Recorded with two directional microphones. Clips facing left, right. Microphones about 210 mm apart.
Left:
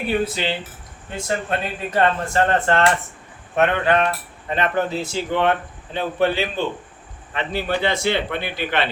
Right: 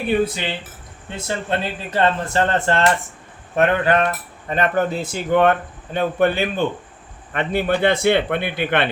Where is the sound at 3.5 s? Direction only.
40° right (ahead or behind).